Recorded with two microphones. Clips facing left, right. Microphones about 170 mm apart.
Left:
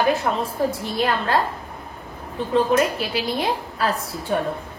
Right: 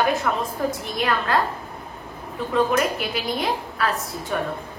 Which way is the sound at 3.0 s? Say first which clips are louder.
Left 2 dB; 30° left (ahead or behind).